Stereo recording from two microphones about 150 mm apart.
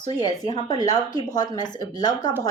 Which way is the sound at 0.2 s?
25° left (ahead or behind).